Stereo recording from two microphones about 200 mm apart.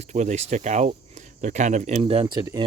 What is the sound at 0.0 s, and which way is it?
Speech, 35° right (ahead or behind).